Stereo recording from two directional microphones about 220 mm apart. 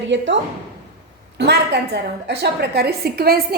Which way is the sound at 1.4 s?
50° right (ahead or behind).